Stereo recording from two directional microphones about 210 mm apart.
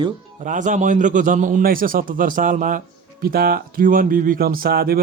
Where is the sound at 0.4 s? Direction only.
40° right (ahead or behind).